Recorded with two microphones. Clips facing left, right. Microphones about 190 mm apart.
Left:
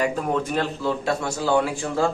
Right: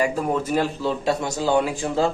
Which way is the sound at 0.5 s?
15° right (ahead or behind).